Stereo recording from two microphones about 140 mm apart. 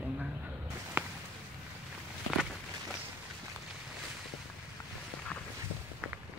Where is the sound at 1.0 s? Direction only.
15° right (ahead or behind).